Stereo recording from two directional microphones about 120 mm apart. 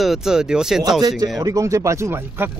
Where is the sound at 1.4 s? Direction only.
30° right (ahead or behind).